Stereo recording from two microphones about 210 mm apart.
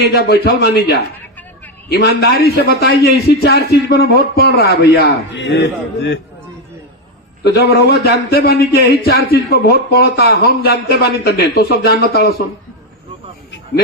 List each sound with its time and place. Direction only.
0.0 s a man's voice: 50° left (ahead or behind)
7.4 s a man's voice: 50° left (ahead or behind)